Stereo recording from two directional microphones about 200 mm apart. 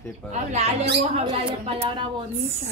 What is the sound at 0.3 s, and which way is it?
Speech, 35° right (ahead or behind).